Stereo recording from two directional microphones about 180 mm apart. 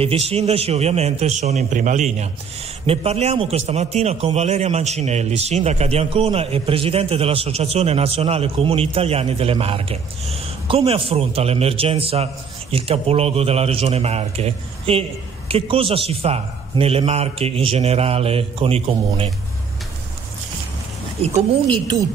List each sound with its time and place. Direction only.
0.0 s a man's voice: 35° right (ahead or behind)
21.3 s a woman's voice: 25° right (ahead or behind)